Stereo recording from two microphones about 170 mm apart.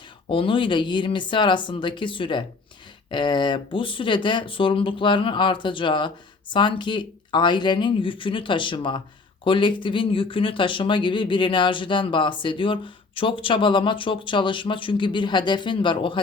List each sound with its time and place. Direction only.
0.3 s speech: 30° left (ahead or behind)